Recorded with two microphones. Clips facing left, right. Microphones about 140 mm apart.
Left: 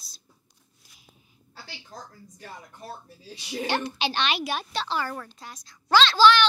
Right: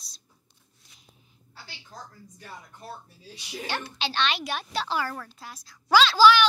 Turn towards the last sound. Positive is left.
turn(degrees=-10)  # may be behind; listen again after turning